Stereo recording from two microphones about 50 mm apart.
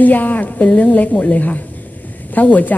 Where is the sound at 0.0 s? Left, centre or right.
Left.